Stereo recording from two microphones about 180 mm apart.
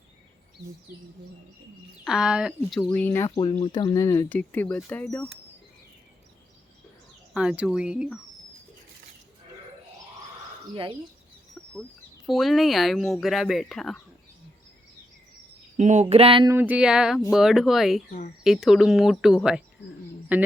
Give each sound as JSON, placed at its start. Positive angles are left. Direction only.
{"t": 2.0, "sound": "speech", "side_deg": -5}
{"t": 3.2, "sound": "speech", "side_deg": 25}
{"t": 7.3, "sound": "speech", "side_deg": -5}
{"t": 11.6, "sound": "a sound", "side_deg": 5}
{"t": 12.2, "sound": "speech", "side_deg": 0}
{"t": 15.8, "sound": "a sound", "side_deg": -40}
{"t": 16.5, "sound": "a man's voice", "side_deg": -10}